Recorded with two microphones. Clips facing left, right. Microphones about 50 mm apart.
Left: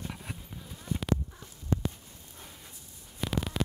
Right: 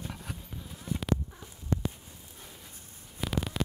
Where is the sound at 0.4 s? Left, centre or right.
Centre.